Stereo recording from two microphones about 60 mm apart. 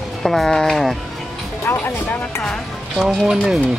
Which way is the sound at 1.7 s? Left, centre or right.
Left.